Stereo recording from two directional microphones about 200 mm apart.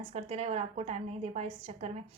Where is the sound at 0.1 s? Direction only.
35° right (ahead or behind).